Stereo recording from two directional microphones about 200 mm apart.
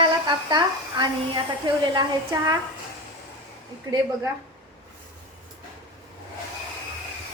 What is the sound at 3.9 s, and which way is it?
Speech, 20° right (ahead or behind).